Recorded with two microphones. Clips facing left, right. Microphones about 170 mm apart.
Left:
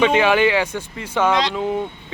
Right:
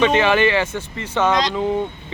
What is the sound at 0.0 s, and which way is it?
Speech, 10° left (ahead or behind).